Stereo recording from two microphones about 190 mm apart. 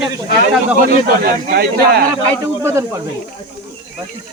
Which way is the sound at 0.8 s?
50° right (ahead or behind).